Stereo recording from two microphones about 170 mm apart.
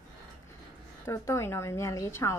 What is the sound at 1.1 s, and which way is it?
Speech, 15° left (ahead or behind).